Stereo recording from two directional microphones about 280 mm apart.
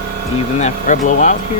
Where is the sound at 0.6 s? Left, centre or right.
Left.